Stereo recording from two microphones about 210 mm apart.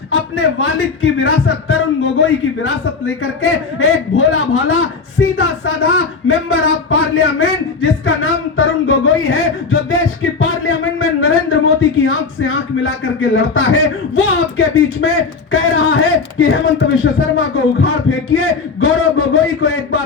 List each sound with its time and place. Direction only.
0.1 s speech: 80° left
5.4 s speech: 85° left
10.4 s speech: 75° left (ahead or behind)